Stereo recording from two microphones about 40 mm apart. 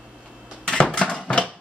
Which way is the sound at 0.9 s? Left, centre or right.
Left.